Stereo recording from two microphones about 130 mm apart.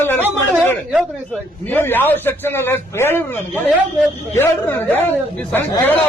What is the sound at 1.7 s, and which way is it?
A man's voice, 15° left (ahead or behind).